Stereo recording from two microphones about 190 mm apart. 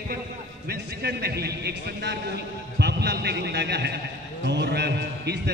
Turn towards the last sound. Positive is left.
turn(degrees=-60)  # may be behind; listen again after turning